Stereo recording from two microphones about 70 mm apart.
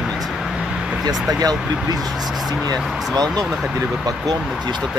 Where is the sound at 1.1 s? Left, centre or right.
Centre.